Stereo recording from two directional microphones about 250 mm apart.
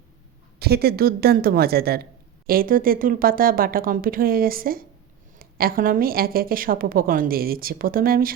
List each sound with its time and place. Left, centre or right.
0.6 s a woman's voice: right